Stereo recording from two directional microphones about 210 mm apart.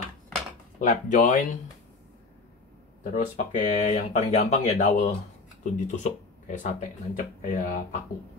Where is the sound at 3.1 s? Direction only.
40° left (ahead or behind).